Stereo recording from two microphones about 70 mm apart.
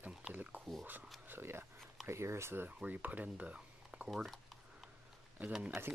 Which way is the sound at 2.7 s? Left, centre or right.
Right.